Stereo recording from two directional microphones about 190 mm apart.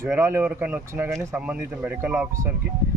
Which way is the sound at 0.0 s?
10° right (ahead or behind).